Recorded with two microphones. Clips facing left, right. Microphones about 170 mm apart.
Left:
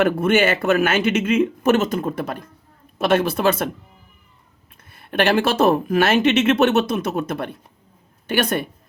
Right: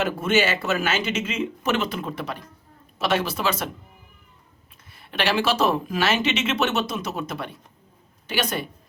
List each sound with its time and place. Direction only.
0.0 s a woman's voice: 55° left (ahead or behind)
4.9 s a woman's voice: 50° left (ahead or behind)